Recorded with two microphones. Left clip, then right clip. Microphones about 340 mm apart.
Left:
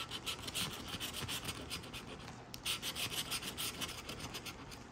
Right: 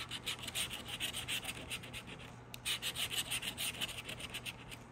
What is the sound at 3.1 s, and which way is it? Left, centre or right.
Rub, centre.